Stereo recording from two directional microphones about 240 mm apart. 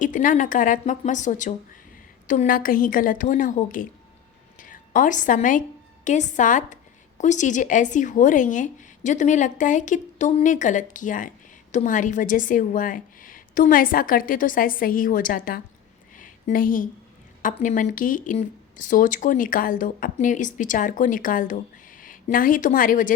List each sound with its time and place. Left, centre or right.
0.0 s a woman's voice: left
16.1 s a sound: left
17.4 s speech: left